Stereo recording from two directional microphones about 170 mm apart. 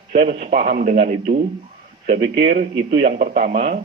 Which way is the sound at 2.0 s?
80° right.